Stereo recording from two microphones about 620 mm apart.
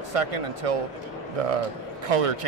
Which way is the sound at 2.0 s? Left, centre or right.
Right.